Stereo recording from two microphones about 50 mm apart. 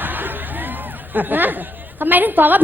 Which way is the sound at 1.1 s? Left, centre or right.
Right.